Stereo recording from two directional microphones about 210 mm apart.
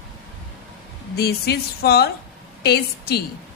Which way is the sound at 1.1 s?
50° left (ahead or behind).